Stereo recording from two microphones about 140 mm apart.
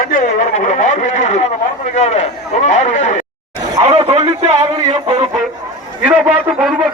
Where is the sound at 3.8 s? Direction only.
45° right (ahead or behind).